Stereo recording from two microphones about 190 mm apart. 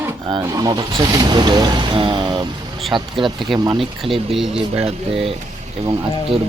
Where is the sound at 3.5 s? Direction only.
20° right (ahead or behind).